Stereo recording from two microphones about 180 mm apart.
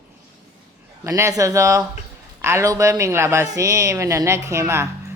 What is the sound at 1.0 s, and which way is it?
Speech, 15° right (ahead or behind).